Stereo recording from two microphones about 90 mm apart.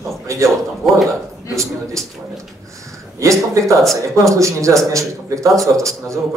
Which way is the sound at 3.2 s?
35° right (ahead or behind).